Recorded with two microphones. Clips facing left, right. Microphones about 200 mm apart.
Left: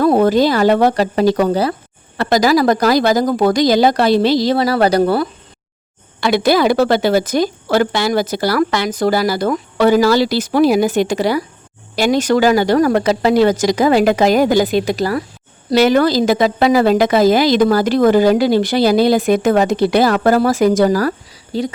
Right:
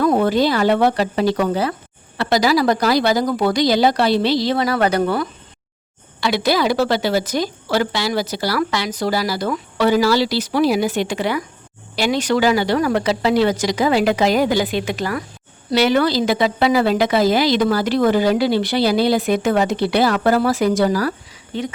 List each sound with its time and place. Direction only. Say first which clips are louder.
0.0 s a woman's voice: left 4 dB; 40° left (ahead or behind)
6.1 s a woman's voice: left 5 dB; 50° left (ahead or behind); by 21.7 s 35° left (ahead or behind)